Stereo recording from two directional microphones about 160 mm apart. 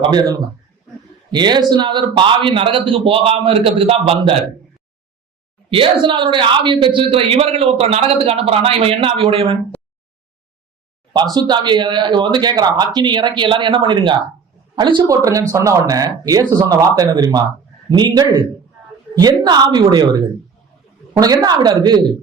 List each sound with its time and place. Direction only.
0.1 s a man's voice: 25° right (ahead or behind)
5.7 s a man's voice: 30° right (ahead or behind)
11.1 s speech: 25° right (ahead or behind)